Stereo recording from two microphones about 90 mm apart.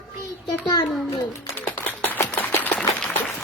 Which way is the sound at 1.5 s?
20° left (ahead or behind).